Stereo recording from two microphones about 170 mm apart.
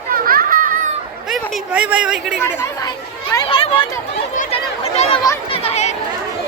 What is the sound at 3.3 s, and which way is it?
Speech, 30° left (ahead or behind).